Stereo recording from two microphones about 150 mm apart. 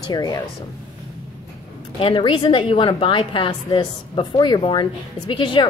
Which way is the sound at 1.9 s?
35° left (ahead or behind).